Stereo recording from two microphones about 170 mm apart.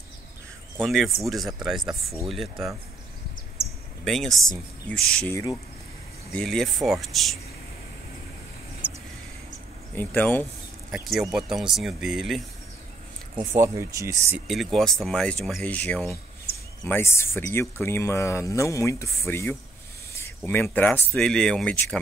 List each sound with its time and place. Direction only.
0.8 s speech: centre (ahead or behind)
4.0 s speech: centre (ahead or behind)
5.3 s speech: 20° left (ahead or behind)
6.3 s speech: 5° left (ahead or behind)
9.9 s speech: 10° left (ahead or behind)
10.9 s speech: centre (ahead or behind)
13.6 s speech: 15° right (ahead or behind)
14.5 s speech: centre (ahead or behind)